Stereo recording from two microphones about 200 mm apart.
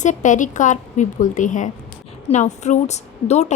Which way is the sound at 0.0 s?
40° left (ahead or behind).